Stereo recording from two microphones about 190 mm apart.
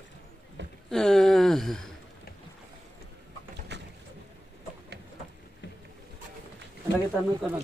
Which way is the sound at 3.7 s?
65° right (ahead or behind).